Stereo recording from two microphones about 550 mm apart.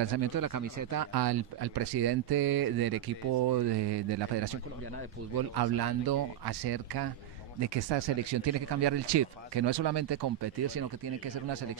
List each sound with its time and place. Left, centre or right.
0.2 s speech: right
5.6 s speech: right